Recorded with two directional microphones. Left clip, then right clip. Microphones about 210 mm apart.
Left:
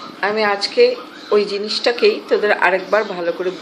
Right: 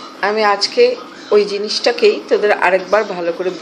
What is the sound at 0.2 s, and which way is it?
A woman's voice, centre (ahead or behind).